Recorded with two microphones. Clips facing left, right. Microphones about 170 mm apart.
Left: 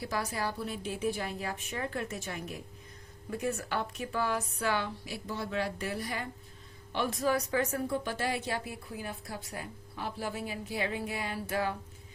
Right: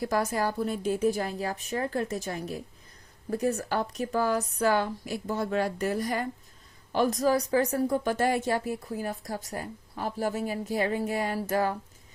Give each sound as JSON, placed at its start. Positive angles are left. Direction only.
{"t": 0.0, "sound": "a woman's voice", "side_deg": -45}